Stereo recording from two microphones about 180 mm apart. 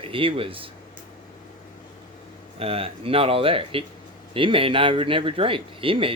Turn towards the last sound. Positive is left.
turn(degrees=-30)  # may be behind; listen again after turning